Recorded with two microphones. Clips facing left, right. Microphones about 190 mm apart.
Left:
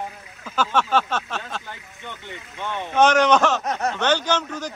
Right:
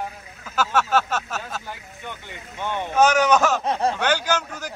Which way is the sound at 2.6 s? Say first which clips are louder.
Even; 10° right (ahead or behind).